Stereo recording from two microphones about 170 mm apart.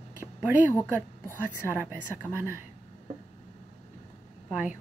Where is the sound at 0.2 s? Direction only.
10° right (ahead or behind).